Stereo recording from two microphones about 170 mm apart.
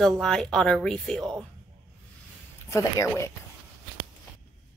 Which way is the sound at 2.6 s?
15° left (ahead or behind).